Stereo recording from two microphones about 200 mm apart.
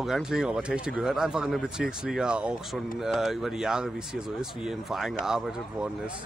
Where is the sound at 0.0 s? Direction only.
Centre (ahead or behind).